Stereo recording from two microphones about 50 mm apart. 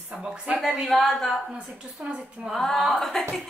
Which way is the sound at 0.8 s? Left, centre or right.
Centre.